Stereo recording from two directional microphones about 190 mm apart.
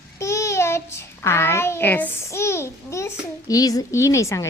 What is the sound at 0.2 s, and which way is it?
A child's voice, 15° left (ahead or behind).